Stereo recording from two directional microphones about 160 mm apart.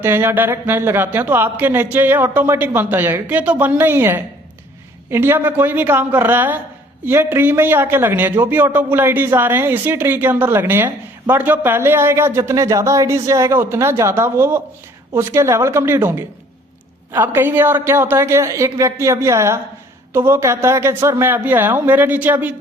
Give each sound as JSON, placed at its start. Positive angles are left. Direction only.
{"t": 0.0, "sound": "a man's voice", "side_deg": -15}